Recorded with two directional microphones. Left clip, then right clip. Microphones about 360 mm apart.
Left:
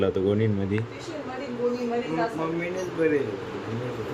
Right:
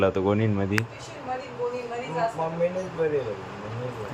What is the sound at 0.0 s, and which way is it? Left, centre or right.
Speech, centre.